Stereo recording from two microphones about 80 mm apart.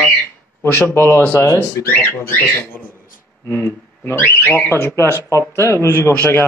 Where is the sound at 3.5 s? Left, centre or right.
Left.